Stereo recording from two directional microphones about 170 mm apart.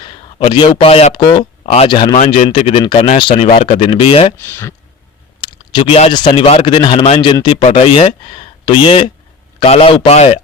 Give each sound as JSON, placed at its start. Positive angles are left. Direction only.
{"t": 0.0, "sound": "a man's voice", "side_deg": 30}
{"t": 1.9, "sound": "a man's voice", "side_deg": 25}
{"t": 4.4, "sound": "speech", "side_deg": 15}
{"t": 5.4, "sound": "a man's voice", "side_deg": 25}